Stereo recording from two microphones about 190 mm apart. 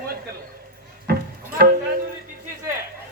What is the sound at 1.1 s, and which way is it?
Music, 50° right (ahead or behind).